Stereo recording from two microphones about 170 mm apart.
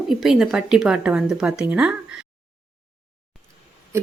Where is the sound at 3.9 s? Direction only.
15° right (ahead or behind).